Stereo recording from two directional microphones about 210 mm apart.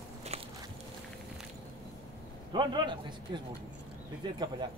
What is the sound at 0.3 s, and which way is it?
Biting, 30° right (ahead or behind).